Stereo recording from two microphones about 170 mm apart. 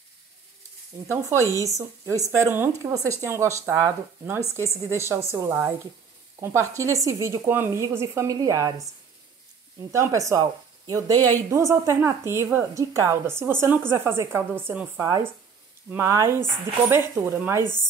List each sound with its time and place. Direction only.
1.0 s a woman's voice: 15° right (ahead or behind)
9.8 s a woman's voice: 20° right (ahead or behind)